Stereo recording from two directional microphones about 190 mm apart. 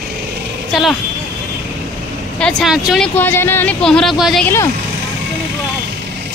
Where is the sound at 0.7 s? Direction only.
Centre (ahead or behind).